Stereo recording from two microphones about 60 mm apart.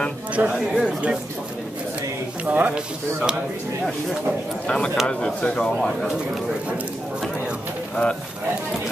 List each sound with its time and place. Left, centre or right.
0.4 s speech: right
2.4 s speech: right
4.6 s speech: centre
7.9 s speech: centre